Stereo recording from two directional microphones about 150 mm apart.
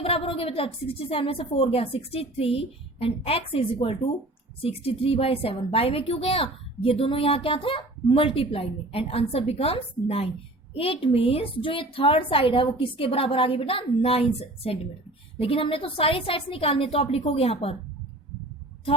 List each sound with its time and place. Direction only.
0.0 s a woman's voice: 40° left (ahead or behind)